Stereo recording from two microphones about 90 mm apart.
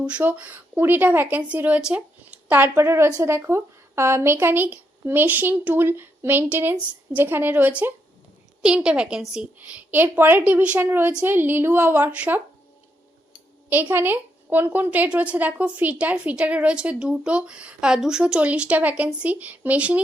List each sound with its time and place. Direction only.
0.0 s a woman's voice: 15° right (ahead or behind)
13.9 s a woman's voice: 25° right (ahead or behind)